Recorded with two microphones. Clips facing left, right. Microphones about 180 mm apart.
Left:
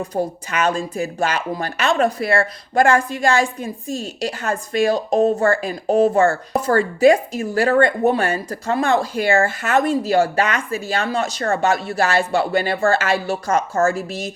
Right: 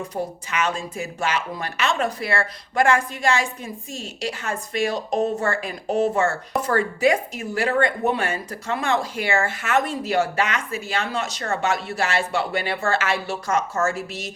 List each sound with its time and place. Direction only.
0.1 s a woman's voice: 40° left (ahead or behind)
5.5 s a woman's voice: 35° left (ahead or behind)